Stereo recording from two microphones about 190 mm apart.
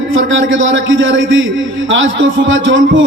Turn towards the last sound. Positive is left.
turn(degrees=-90)